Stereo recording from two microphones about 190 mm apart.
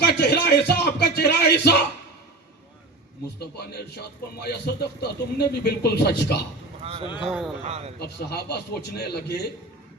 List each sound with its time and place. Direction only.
0.1 s a sound: 60° left (ahead or behind)
3.3 s speech: 60° left (ahead or behind)
7.0 s speech: 25° left (ahead or behind)
7.3 s speech: centre (ahead or behind)
7.6 s speech: 35° right (ahead or behind)
8.0 s speech: 60° left (ahead or behind)